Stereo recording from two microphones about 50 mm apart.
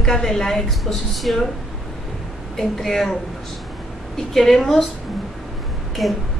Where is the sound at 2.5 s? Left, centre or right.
Centre.